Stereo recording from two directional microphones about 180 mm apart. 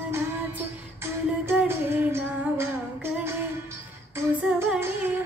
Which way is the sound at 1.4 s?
10° right (ahead or behind).